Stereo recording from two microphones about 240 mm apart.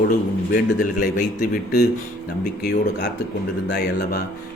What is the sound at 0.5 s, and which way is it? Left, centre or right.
Speech, left.